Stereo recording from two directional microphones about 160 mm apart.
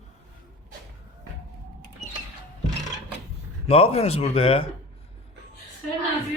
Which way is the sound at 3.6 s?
40° left (ahead or behind).